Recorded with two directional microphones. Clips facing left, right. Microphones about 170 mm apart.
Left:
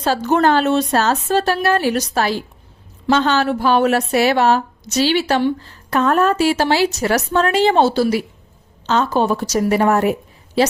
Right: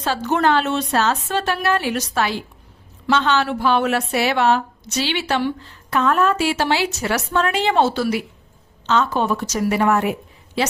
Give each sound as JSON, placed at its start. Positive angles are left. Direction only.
{"t": 0.0, "sound": "a woman's voice", "side_deg": 40}